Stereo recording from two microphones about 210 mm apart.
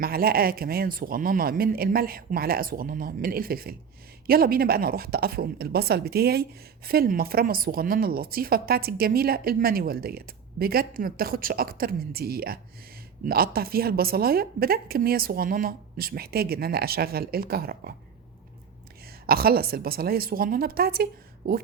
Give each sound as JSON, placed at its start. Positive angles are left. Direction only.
{"t": 0.0, "sound": "a woman's voice", "side_deg": -45}
{"t": 19.3, "sound": "a woman's voice", "side_deg": -45}